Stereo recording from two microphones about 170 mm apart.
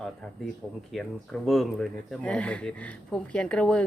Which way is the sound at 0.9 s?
Centre (ahead or behind).